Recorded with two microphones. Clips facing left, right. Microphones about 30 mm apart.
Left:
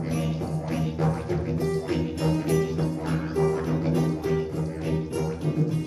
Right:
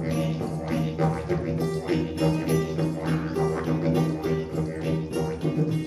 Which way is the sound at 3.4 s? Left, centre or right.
Centre.